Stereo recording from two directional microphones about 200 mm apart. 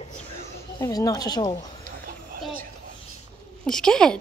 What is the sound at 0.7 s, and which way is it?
Speech, 15° left (ahead or behind).